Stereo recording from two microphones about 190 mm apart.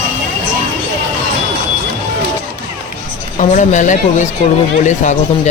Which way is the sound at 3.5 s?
40° left (ahead or behind).